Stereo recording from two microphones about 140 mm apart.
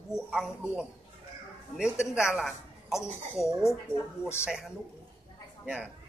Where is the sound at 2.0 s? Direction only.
5° right (ahead or behind).